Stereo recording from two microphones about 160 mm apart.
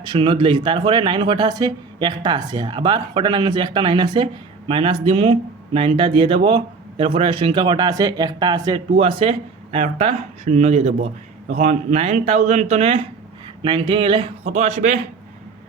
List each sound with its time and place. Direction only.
0.0 s speech: 30° right (ahead or behind)
13.6 s speech: 30° right (ahead or behind)
14.5 s speech: 50° right (ahead or behind)